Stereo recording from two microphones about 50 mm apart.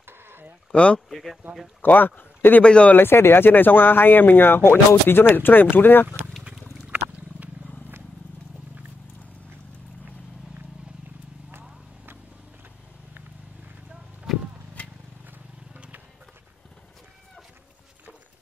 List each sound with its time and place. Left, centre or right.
0.0 s sheep: right
0.7 s speech: left
1.1 s speech: centre
1.8 s speech: left
2.6 s speech: centre
2.9 s speech: left
6.9 s a sound: right
14.3 s clip-clop: centre